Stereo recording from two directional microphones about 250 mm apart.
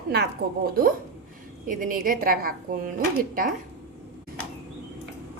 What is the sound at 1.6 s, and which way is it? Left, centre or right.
A woman's voice, right.